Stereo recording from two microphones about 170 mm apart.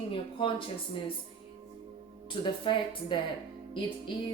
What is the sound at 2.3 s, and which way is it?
Speech, 30° left (ahead or behind).